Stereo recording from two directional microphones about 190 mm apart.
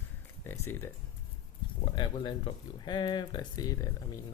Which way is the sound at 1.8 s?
25° left (ahead or behind).